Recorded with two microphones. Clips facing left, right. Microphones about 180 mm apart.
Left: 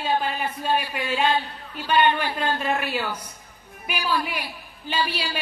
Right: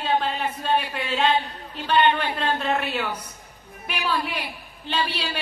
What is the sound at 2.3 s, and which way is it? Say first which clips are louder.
Speech: right 1 dB; 10° left (ahead or behind).